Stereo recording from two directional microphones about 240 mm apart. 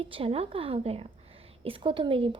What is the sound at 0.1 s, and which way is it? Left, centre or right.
A child's voice, right.